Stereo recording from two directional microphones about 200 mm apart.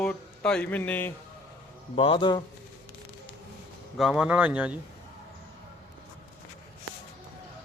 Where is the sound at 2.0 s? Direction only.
25° left (ahead or behind).